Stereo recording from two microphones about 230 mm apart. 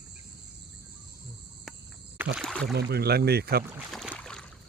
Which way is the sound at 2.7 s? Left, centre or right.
Right.